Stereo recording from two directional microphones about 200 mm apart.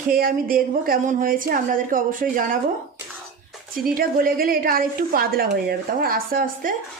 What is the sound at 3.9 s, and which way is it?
Speech, 45° right (ahead or behind).